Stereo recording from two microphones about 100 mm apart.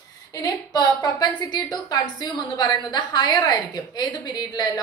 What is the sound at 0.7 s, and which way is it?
A woman's voice, 40° left (ahead or behind).